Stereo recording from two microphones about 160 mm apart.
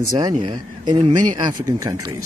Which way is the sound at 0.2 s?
25° right (ahead or behind).